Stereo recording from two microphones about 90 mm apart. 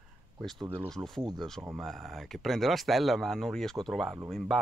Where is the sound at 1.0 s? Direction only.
30° right (ahead or behind).